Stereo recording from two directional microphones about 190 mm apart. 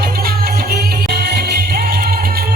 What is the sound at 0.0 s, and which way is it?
Music, 55° right (ahead or behind).